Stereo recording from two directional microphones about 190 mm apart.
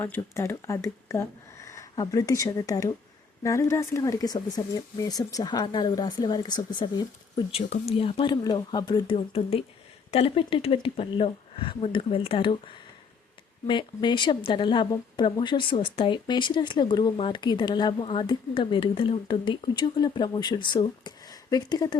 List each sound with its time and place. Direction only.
0.0 s a woman's voice: 15° left (ahead or behind)